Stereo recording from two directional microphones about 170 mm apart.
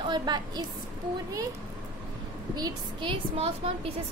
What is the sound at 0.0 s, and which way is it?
Speech, 25° right (ahead or behind).